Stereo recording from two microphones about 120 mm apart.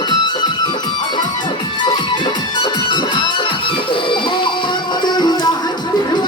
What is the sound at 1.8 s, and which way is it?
Music, 40° left (ahead or behind).